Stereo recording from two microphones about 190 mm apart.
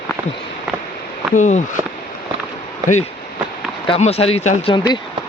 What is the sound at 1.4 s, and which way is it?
Speech, 40° left (ahead or behind).